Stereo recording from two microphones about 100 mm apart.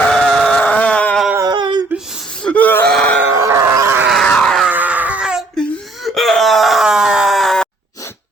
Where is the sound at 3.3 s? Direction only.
30° right (ahead or behind).